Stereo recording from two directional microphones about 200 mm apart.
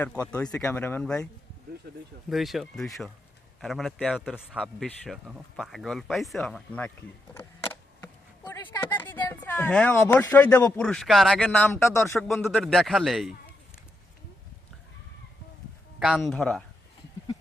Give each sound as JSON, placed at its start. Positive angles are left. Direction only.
{"t": 0.3, "sound": "speech", "side_deg": 5}
{"t": 2.3, "sound": "speech", "side_deg": 0}
{"t": 7.3, "sound": "a sound", "side_deg": 10}
{"t": 8.7, "sound": "speech", "side_deg": 20}
{"t": 9.0, "sound": "a sound", "side_deg": 10}
{"t": 9.3, "sound": "speech", "side_deg": 10}
{"t": 11.7, "sound": "speech", "side_deg": 15}
{"t": 12.3, "sound": "speech", "side_deg": 0}
{"t": 16.0, "sound": "speech", "side_deg": 0}